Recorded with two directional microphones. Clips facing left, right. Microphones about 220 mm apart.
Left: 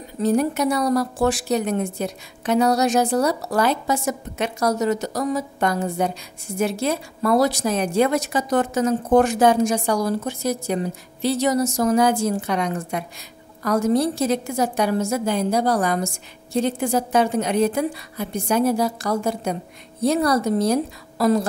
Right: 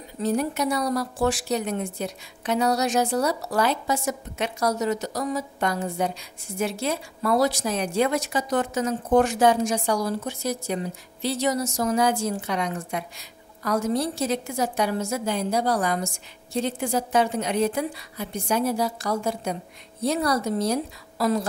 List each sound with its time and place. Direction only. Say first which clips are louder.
0.2 s a woman's voice: left 5 dB; 50° left (ahead or behind)